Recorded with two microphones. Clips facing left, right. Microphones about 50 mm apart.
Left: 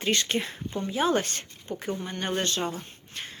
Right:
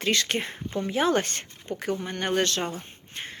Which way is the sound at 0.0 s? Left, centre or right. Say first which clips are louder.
Right 1 dB; right.